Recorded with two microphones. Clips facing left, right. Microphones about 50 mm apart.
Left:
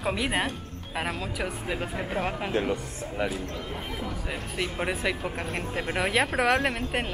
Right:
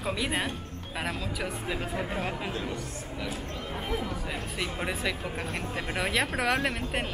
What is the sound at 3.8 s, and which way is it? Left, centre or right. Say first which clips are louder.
Speech: right 1 dB; centre.